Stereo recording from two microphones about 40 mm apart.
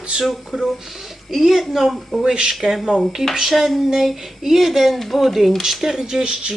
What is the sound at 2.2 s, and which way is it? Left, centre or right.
Speech, right.